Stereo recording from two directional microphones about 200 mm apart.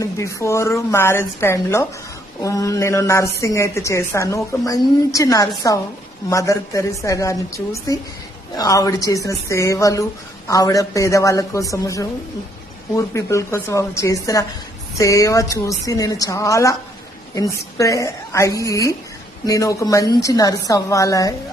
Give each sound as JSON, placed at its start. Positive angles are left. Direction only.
{"t": 0.0, "sound": "a woman's voice", "side_deg": 15}